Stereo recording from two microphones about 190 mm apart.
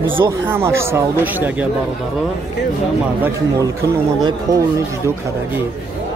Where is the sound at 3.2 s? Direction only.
15° right (ahead or behind).